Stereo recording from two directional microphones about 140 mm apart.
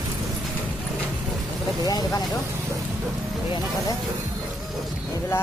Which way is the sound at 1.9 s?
25° left (ahead or behind).